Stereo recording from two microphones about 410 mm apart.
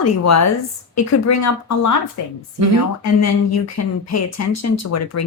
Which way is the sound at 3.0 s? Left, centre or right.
Left.